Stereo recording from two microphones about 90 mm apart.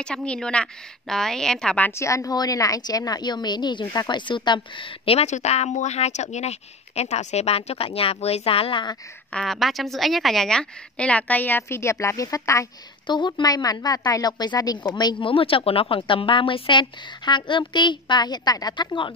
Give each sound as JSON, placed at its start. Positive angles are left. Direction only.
{"t": 0.0, "sound": "a woman's voice", "side_deg": 10}
{"t": 1.8, "sound": "a woman's voice", "side_deg": 30}
{"t": 7.5, "sound": "a woman's voice", "side_deg": 90}
{"t": 9.3, "sound": "a woman's voice", "side_deg": 5}
{"t": 13.0, "sound": "a woman's voice", "side_deg": 60}
{"t": 15.2, "sound": "speech", "side_deg": 80}